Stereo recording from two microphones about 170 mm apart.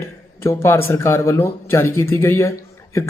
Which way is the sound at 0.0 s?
15° left (ahead or behind).